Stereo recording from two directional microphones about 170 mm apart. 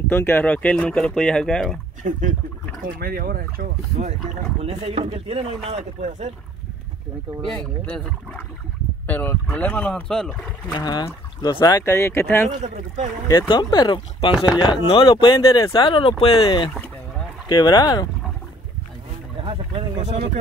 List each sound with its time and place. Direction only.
0.1 s speech: 10° left (ahead or behind)
2.0 s speech: 45° right (ahead or behind)
3.0 s speech: 60° right (ahead or behind)
4.6 s speech: 35° right (ahead or behind)
7.4 s speech: 10° left (ahead or behind)
10.7 s speech: 25° left (ahead or behind)
12.6 s speech: 45° right (ahead or behind)
13.3 s speech: 25° left (ahead or behind)
19.4 s speech: 30° right (ahead or behind)
20.0 s speech: 40° right (ahead or behind)